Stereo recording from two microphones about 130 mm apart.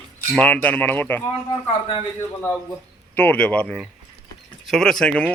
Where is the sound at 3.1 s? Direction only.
10° left (ahead or behind).